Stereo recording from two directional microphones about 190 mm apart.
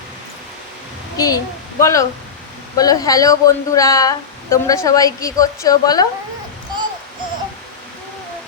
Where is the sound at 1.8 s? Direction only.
15° left (ahead or behind).